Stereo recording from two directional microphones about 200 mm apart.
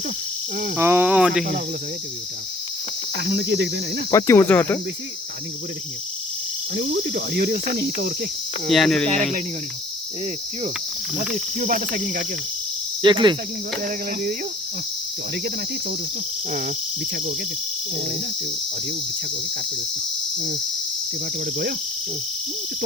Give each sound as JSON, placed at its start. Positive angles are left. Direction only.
{"t": 0.8, "sound": "speech", "side_deg": -10}
{"t": 3.2, "sound": "cricket", "side_deg": -55}
{"t": 4.1, "sound": "cricket", "side_deg": 10}
{"t": 6.7, "sound": "cricket", "side_deg": -55}
{"t": 8.7, "sound": "cricket", "side_deg": 0}
{"t": 11.6, "sound": "cricket", "side_deg": -45}
{"t": 13.0, "sound": "cricket", "side_deg": -25}
{"t": 13.8, "sound": "cricket", "side_deg": -45}
{"t": 16.5, "sound": "cricket", "side_deg": -45}